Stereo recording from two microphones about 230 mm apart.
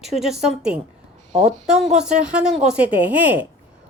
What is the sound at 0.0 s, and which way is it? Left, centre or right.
Speech, centre.